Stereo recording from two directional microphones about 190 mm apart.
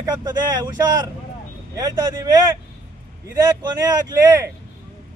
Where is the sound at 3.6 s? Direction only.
20° right (ahead or behind).